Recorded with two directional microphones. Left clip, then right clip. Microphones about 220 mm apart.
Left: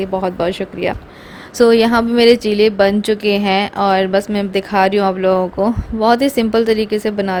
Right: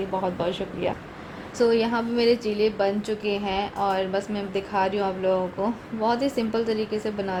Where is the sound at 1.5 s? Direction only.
40° left (ahead or behind).